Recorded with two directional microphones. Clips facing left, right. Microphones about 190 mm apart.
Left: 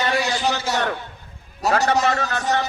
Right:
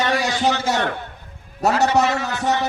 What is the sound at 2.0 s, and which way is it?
Speech, 65° right (ahead or behind).